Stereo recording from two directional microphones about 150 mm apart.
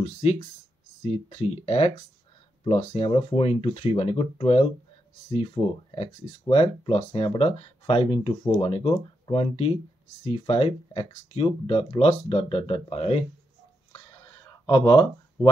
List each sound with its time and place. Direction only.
0.0 s speech: 45° left (ahead or behind)
14.7 s speech: 30° left (ahead or behind)